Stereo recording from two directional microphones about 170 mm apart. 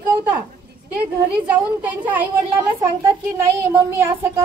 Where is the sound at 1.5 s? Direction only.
10° right (ahead or behind).